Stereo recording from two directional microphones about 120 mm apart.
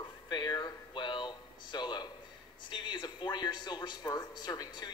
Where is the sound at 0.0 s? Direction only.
40° left (ahead or behind).